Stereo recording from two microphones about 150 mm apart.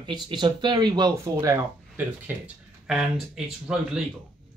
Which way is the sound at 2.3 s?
10° right (ahead or behind).